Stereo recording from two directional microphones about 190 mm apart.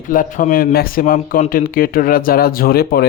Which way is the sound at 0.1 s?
45° left (ahead or behind).